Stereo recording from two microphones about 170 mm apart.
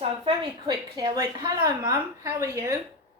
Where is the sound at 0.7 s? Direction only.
25° right (ahead or behind).